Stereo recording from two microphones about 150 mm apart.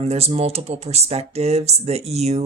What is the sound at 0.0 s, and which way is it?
Speech, 45° right (ahead or behind).